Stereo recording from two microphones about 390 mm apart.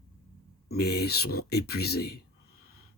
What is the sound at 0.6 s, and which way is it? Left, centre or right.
Speech, left.